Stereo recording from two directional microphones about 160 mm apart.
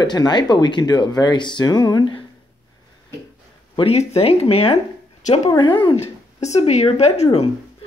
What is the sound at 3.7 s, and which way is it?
Speech, 40° left (ahead or behind).